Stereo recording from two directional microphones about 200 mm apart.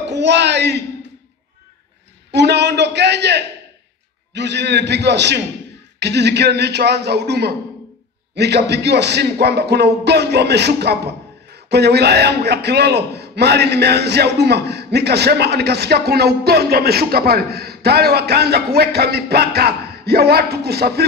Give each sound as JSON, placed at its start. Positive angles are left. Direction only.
{"t": 0.0, "sound": "a man's voice", "side_deg": -60}
{"t": 2.3, "sound": "speech", "side_deg": -60}